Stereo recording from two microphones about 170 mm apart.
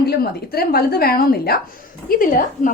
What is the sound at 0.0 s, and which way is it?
A woman's voice, 65° left (ahead or behind).